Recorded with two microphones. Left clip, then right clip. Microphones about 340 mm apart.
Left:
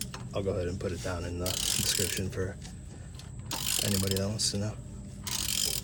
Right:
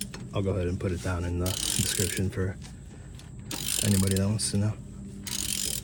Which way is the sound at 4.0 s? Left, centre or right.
Centre.